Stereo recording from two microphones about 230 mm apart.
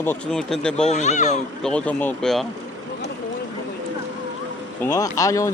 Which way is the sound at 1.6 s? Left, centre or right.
Centre.